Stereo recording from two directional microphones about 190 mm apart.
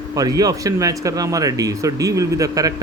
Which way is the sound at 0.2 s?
20° right (ahead or behind).